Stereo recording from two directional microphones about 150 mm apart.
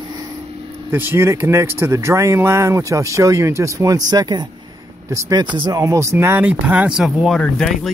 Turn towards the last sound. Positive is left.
turn(degrees=5)  # may be behind; listen again after turning